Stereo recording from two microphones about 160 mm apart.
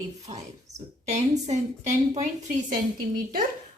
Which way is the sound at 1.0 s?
45° right (ahead or behind).